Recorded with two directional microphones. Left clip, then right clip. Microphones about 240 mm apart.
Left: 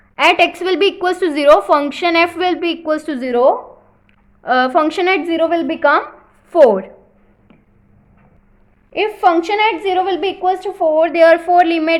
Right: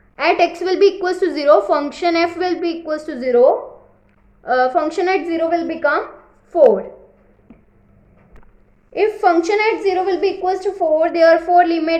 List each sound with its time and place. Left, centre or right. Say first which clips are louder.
0.2 s a woman's voice: left 3 dB; left
8.9 s a woman's voice: left 1 dB; left